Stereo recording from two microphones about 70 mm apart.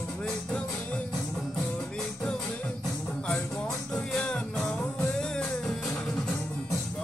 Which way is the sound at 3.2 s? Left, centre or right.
Centre.